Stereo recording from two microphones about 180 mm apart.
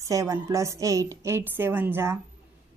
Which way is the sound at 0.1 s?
20° right (ahead or behind).